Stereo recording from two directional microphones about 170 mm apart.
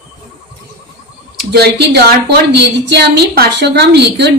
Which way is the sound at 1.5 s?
70° right (ahead or behind).